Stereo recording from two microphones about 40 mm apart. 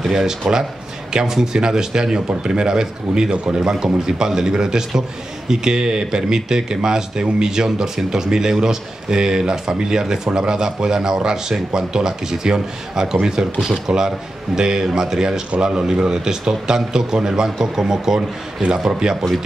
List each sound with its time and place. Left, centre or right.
0.0 s speech: centre